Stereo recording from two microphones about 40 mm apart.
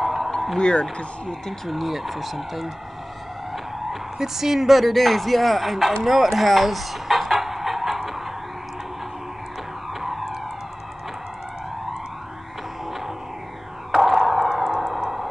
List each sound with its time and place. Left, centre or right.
0.0 s a sound: centre
0.6 s speech: left
1.7 s speech: centre
3.9 s speech: centre
6.0 s music: centre
9.9 s police car: centre
13.9 s a sound: centre